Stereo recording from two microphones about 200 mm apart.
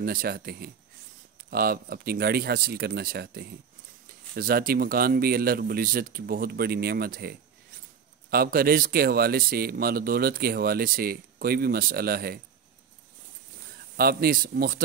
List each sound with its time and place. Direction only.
0.0 s speech: 50° right (ahead or behind)
13.9 s speech: 50° right (ahead or behind)